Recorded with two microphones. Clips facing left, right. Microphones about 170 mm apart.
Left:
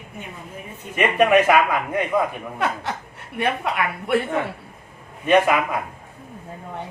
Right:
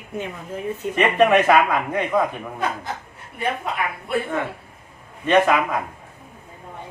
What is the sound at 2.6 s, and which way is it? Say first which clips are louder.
A woman's voice: left 2 dB; 75° left (ahead or behind).